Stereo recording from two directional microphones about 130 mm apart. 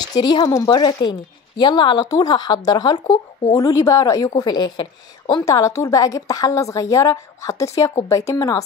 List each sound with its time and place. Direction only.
0.0 s a woman's voice: 30° left (ahead or behind)
5.4 s a woman's voice: 25° left (ahead or behind)